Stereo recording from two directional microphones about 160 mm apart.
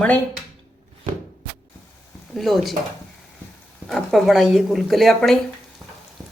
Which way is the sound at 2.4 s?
Centre (ahead or behind).